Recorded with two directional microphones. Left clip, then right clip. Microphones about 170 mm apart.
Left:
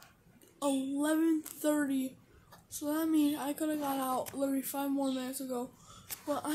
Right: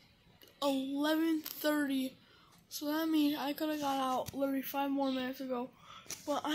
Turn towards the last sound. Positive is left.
turn(degrees=10)  # may be behind; listen again after turning